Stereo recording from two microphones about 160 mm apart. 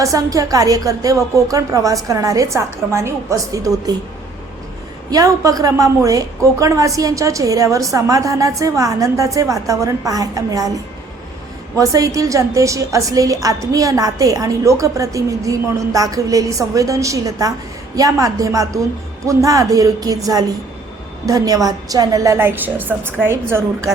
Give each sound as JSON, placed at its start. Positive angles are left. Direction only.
{"t": 0.0, "sound": "a woman's voice", "side_deg": -20}
{"t": 5.1, "sound": "a woman's voice", "side_deg": -20}
{"t": 11.8, "sound": "a woman's voice", "side_deg": -20}